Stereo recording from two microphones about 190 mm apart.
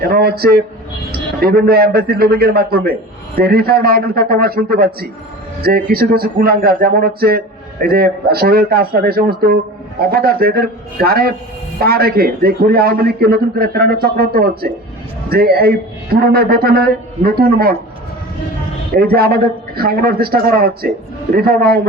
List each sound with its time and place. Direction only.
0.0 s speech: 55° right (ahead or behind)
18.9 s speech: 55° right (ahead or behind)